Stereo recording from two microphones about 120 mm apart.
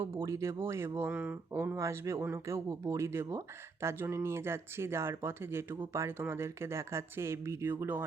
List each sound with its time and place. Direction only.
0.2 s speech: 25° right (ahead or behind)